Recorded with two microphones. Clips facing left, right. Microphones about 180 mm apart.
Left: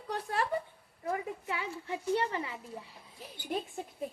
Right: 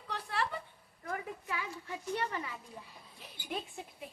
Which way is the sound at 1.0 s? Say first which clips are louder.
Left 5 dB; 25° left (ahead or behind).